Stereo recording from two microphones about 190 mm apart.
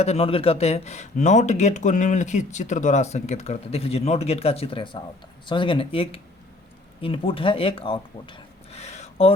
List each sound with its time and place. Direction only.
0.0 s speech: 30° left (ahead or behind)